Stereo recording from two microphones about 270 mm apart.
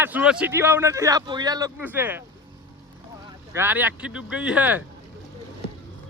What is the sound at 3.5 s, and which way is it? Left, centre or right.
Speech, centre.